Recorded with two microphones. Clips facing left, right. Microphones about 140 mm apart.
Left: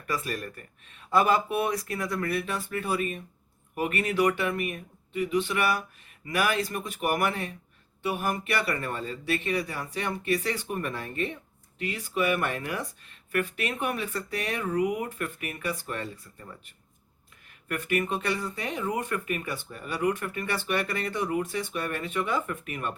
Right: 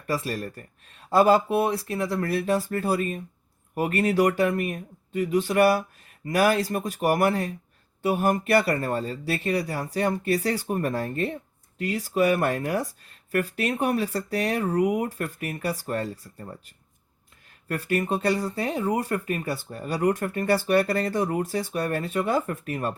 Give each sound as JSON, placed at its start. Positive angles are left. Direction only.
{"t": 0.1, "sound": "speech", "side_deg": -30}
{"t": 17.7, "sound": "speech", "side_deg": -35}